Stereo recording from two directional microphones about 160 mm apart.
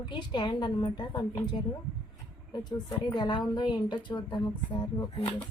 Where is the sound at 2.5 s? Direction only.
25° left (ahead or behind).